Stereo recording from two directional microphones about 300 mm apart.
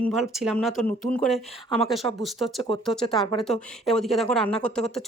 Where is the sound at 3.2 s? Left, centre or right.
Centre.